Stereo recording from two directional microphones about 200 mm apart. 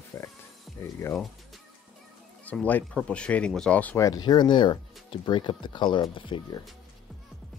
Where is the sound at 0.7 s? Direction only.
15° left (ahead or behind).